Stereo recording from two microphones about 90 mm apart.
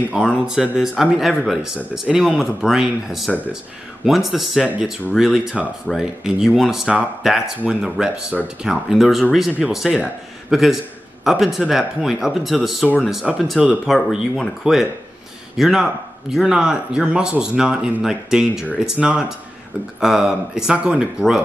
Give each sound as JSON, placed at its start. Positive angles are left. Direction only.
{"t": 0.1, "sound": "speech", "side_deg": -10}